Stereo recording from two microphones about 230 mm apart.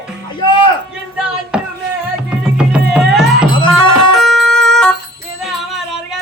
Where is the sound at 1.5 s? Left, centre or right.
Centre.